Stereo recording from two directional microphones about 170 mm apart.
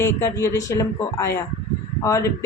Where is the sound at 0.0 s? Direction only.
15° left (ahead or behind).